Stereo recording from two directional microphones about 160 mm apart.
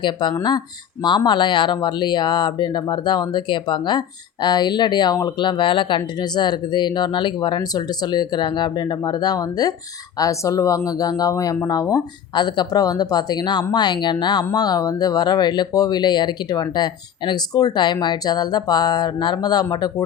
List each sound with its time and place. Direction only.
0.0 s speech: 30° left (ahead or behind)